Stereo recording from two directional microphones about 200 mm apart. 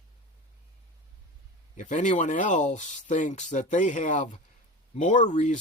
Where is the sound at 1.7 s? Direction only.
40° left (ahead or behind).